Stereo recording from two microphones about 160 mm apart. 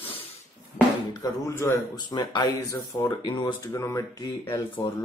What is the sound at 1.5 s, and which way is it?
Speech, 15° left (ahead or behind).